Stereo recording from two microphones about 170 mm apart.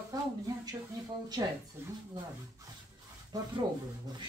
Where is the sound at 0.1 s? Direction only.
25° right (ahead or behind).